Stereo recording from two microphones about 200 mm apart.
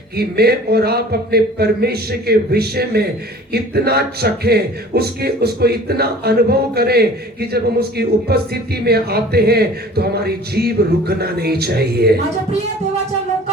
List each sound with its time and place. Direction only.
0.2 s speech: 50° right (ahead or behind)